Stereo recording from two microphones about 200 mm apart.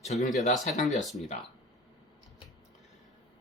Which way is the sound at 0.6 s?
35° left (ahead or behind).